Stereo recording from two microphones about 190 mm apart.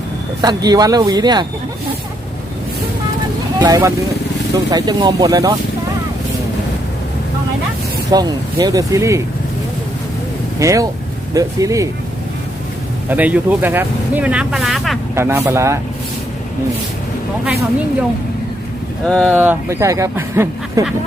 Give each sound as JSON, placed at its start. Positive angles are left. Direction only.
{"t": 0.4, "sound": "speech", "side_deg": -20}
{"t": 3.6, "sound": "speech", "side_deg": -15}
{"t": 8.1, "sound": "speech", "side_deg": -20}
{"t": 10.6, "sound": "speech", "side_deg": -15}
{"t": 13.1, "sound": "speech", "side_deg": -10}
{"t": 15.1, "sound": "speech", "side_deg": -15}
{"t": 19.0, "sound": "speech", "side_deg": 5}
{"t": 19.3, "sound": "speech", "side_deg": -10}